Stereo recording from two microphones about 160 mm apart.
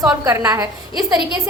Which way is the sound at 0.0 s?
20° right (ahead or behind).